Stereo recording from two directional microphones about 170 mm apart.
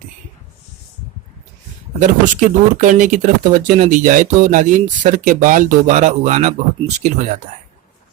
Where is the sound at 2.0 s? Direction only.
45° right (ahead or behind).